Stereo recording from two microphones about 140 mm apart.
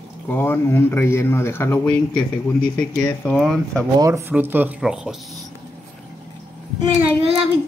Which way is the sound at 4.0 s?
20° right (ahead or behind).